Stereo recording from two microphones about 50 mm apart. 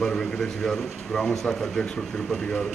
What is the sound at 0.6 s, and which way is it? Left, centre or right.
Speech, centre.